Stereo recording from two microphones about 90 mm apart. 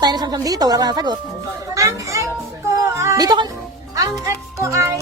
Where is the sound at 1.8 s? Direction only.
35° right (ahead or behind).